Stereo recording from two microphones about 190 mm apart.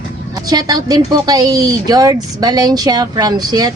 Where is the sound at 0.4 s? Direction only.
20° right (ahead or behind).